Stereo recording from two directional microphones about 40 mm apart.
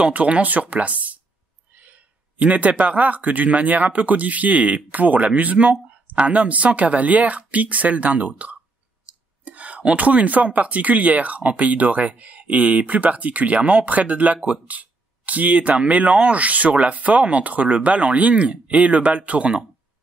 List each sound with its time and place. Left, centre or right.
0.1 s speech: right